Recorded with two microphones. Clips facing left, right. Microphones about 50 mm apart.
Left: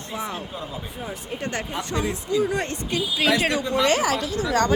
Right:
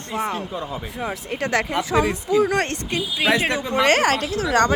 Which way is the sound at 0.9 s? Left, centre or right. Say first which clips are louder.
Right 7 dB; right.